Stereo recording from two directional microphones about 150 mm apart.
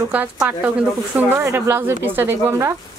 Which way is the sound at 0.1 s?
10° right (ahead or behind).